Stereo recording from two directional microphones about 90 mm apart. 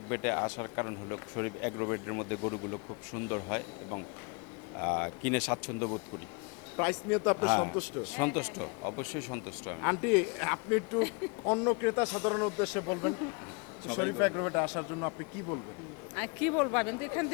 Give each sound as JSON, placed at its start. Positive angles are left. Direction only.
{"t": 0.1, "sound": "speech", "side_deg": 20}
{"t": 4.8, "sound": "speech", "side_deg": 20}